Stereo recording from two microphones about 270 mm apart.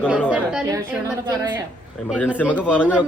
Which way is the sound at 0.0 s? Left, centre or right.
Centre.